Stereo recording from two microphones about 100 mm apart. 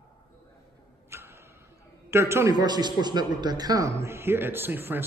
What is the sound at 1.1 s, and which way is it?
Tick-tock, 25° right (ahead or behind).